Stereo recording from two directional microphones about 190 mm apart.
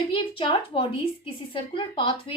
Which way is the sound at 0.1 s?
25° left (ahead or behind).